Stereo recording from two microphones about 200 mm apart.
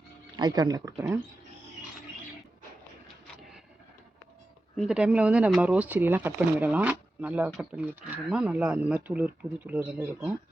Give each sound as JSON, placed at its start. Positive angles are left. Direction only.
{"t": 0.3, "sound": "speech", "side_deg": -20}
{"t": 4.8, "sound": "speech", "side_deg": -5}